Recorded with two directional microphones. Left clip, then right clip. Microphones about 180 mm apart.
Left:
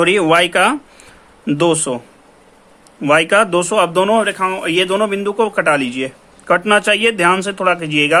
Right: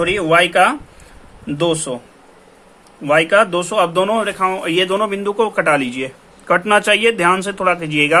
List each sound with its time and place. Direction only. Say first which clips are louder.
0.0 s speech: left 2 dB; 30° left (ahead or behind)
3.0 s speech: left 1 dB; 25° left (ahead or behind)